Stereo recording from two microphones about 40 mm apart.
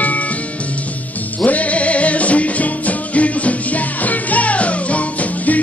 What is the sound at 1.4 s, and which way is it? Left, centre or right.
Music, left.